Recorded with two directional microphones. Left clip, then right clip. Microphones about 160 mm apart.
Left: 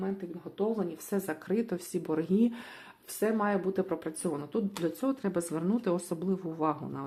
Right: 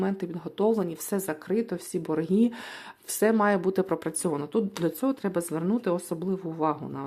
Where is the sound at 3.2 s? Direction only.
50° right (ahead or behind).